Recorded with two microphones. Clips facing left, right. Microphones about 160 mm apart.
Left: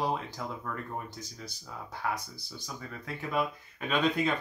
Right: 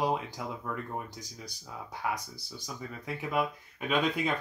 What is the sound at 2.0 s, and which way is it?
Speech, 10° right (ahead or behind).